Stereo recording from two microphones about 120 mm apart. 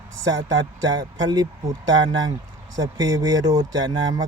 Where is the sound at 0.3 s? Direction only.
35° right (ahead or behind).